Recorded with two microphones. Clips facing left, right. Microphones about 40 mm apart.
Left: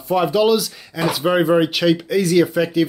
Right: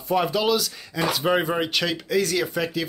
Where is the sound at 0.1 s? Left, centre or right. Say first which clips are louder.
Left 6 dB; centre.